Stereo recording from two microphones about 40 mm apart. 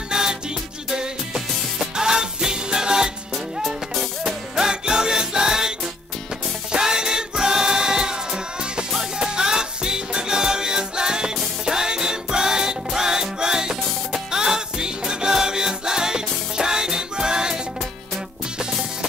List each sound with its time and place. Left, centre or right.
0.1 s music: centre
4.2 s music: centre